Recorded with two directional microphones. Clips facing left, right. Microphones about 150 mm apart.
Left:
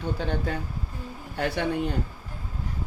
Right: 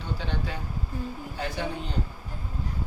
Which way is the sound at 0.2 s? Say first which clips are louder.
Left 5 dB; 50° left (ahead or behind).